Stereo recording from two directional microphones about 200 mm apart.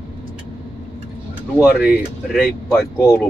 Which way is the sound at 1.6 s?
5° right (ahead or behind).